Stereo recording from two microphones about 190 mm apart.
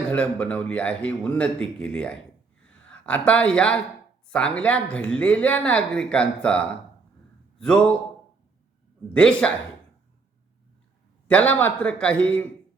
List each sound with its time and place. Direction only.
0.1 s a woman's voice: 5° left (ahead or behind)
9.0 s speech: 5° left (ahead or behind)
11.3 s a woman's voice: 10° left (ahead or behind)